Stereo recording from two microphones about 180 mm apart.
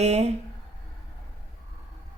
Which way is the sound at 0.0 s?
35° right (ahead or behind).